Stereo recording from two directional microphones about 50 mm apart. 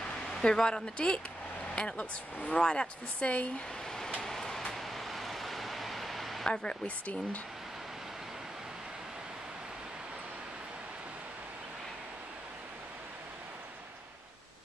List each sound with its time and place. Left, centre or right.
0.3 s a woman's voice: centre
4.2 s vehicle: centre
6.4 s speech: centre